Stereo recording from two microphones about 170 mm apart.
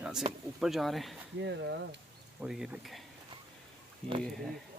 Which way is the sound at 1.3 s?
90° right.